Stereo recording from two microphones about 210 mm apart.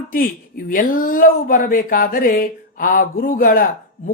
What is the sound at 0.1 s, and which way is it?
A man's voice, 40° left (ahead or behind).